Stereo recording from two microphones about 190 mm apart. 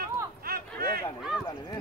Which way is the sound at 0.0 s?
50° right (ahead or behind).